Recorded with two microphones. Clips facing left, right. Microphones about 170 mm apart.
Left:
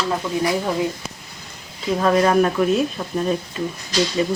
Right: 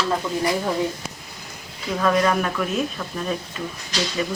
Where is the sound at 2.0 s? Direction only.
30° left (ahead or behind).